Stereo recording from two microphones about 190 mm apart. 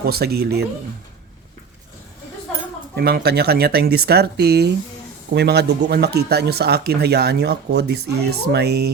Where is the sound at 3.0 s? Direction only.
55° right (ahead or behind).